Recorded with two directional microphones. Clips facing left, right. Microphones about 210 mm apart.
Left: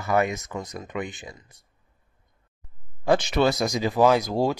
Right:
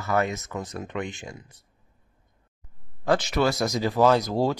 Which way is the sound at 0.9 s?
Centre (ahead or behind).